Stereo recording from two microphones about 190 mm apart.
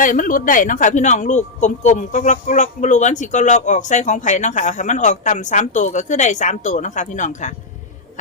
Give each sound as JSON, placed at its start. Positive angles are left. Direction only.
{"t": 0.0, "sound": "a man's voice", "side_deg": 45}